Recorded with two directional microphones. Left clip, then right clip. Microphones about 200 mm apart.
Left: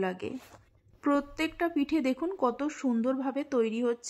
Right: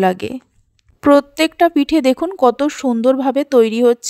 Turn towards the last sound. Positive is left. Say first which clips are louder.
# right 17 dB
turn(degrees=-40)  # may be behind; listen again after turning